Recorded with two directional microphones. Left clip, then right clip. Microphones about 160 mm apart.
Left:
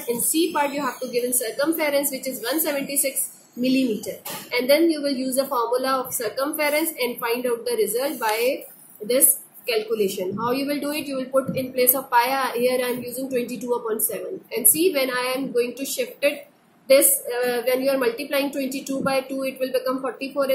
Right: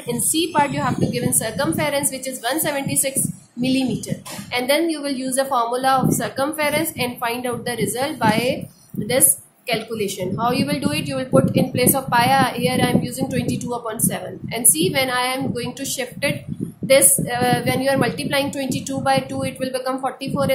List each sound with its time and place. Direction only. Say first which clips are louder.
0.3 s a woman's voice: right 4 dB; 45° right (ahead or behind)
4.5 s a woman's voice: left 1 dB; 55° right (ahead or behind)
9.7 s speech: left 1 dB; 55° right (ahead or behind)